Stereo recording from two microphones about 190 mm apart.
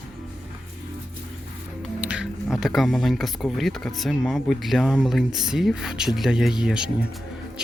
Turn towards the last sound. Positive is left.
turn(degrees=-5)  # may be behind; listen again after turning